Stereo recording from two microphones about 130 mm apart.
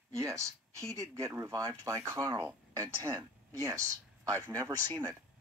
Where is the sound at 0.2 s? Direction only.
25° right (ahead or behind).